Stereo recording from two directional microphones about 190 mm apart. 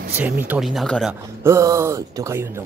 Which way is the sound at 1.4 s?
15° right (ahead or behind).